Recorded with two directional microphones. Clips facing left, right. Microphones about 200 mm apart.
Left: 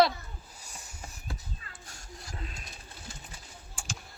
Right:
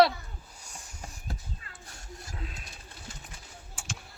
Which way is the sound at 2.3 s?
Centre (ahead or behind).